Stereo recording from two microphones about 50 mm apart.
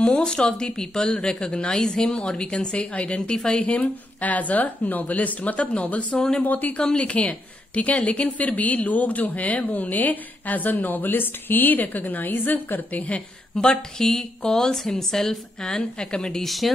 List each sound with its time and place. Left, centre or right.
0.0 s a woman's voice: centre
6.1 s a woman's voice: centre
6.4 s a woman's voice: left
13.6 s a woman's voice: centre
16.4 s speech: centre